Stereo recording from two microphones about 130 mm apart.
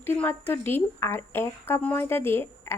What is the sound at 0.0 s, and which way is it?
A woman's voice, 15° left (ahead or behind).